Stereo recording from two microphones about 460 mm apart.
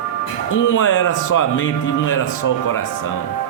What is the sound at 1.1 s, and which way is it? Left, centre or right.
Speech, left.